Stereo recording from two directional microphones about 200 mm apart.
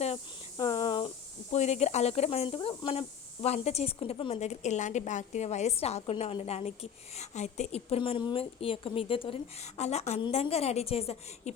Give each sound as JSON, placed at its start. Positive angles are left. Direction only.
{"t": 0.5, "sound": "cricket", "side_deg": 25}
{"t": 1.5, "sound": "speech", "side_deg": 35}